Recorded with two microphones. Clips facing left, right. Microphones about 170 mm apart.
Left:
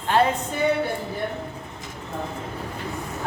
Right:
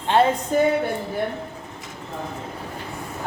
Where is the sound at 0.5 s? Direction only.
40° right (ahead or behind).